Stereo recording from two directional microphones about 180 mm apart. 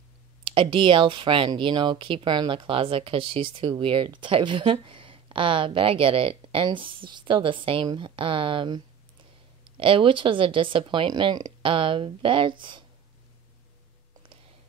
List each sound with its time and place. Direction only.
0.5 s speech: 30° right (ahead or behind)